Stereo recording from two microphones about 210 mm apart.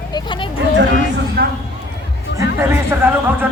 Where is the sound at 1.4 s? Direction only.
45° right (ahead or behind).